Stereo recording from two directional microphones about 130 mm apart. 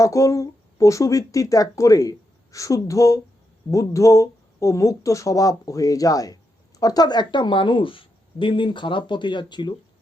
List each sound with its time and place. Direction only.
0.0 s speech: 25° left (ahead or behind)